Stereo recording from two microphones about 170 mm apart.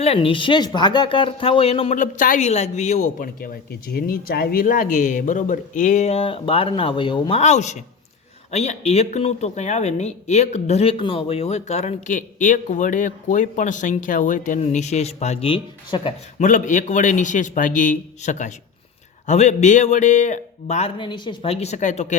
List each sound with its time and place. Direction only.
0.0 s speech: 35° left (ahead or behind)
16.4 s a man's voice: 50° left (ahead or behind)
21.0 s speech: 25° left (ahead or behind); by 22.1 s 45° left (ahead or behind)